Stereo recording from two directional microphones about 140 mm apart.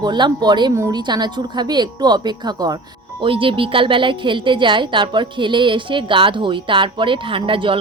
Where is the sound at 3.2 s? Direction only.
40° right (ahead or behind).